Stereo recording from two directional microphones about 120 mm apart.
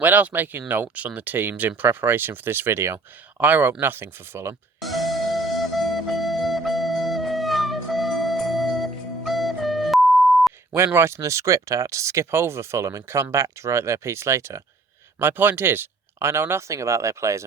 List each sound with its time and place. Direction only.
0.0 s speech: 15° right (ahead or behind)
4.8 s music: centre (ahead or behind)
10.8 s speech: 20° right (ahead or behind)